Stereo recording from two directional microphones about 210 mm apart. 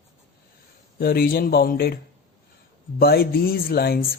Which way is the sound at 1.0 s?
45° left (ahead or behind).